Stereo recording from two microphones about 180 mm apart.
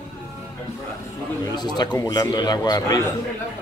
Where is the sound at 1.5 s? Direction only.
25° left (ahead or behind).